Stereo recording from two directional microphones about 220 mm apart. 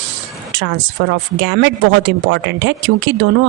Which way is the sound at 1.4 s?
55° right (ahead or behind).